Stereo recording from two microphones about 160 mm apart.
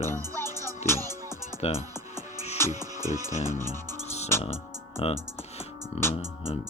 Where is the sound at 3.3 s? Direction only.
45° left (ahead or behind).